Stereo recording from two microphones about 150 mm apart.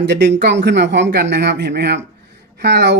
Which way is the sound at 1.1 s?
90° right.